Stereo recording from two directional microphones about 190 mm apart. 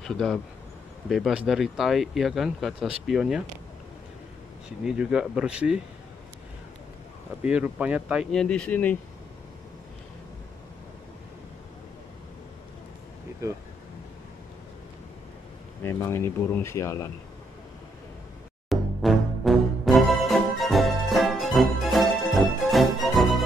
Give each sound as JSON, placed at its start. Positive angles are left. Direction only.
{"t": 0.0, "sound": "speech", "side_deg": 5}
{"t": 4.8, "sound": "speech", "side_deg": -5}
{"t": 7.4, "sound": "speech", "side_deg": -5}
{"t": 13.4, "sound": "speech", "side_deg": -15}
{"t": 15.8, "sound": "speech", "side_deg": 15}
{"t": 18.7, "sound": "music", "side_deg": 0}